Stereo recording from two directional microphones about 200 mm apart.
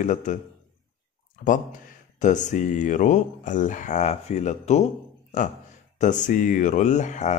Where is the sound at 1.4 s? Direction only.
40° left (ahead or behind).